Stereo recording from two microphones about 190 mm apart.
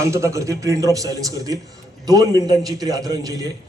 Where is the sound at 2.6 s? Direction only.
20° right (ahead or behind).